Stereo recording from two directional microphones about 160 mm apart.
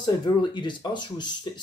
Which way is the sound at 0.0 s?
30° left (ahead or behind).